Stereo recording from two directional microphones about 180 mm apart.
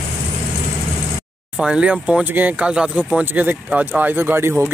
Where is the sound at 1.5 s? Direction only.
5° right (ahead or behind).